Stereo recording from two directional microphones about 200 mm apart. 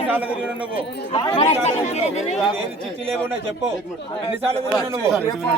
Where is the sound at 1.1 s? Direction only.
25° left (ahead or behind).